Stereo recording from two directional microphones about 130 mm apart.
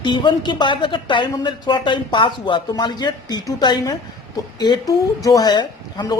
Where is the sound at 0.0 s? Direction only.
35° left (ahead or behind).